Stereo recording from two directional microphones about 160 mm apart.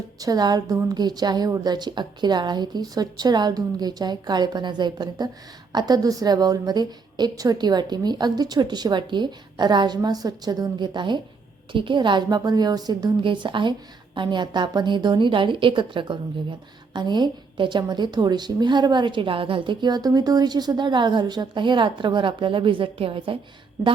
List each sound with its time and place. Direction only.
0.2 s speech: 25° right (ahead or behind)